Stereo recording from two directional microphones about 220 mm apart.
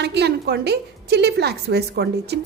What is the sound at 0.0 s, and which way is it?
A woman's voice, 50° right (ahead or behind).